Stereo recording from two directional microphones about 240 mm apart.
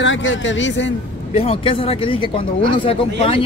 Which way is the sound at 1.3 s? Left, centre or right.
Left.